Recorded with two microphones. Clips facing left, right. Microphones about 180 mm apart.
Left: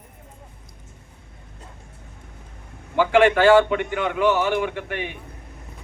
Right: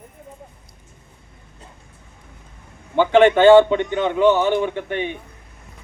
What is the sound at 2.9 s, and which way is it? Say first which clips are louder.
A man's voice: right 3 dB; 25° right (ahead or behind).